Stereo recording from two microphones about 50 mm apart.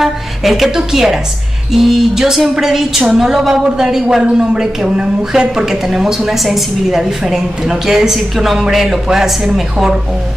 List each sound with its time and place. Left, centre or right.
0.0 s a woman's voice: centre